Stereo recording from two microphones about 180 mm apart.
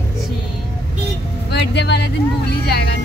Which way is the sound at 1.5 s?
70° left (ahead or behind).